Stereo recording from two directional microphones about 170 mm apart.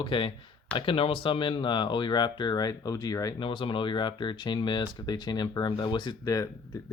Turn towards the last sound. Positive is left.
turn(degrees=25)  # may be behind; listen again after turning